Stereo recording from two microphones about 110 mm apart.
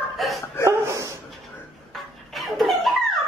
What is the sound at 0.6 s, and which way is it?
Dog, 25° right (ahead or behind).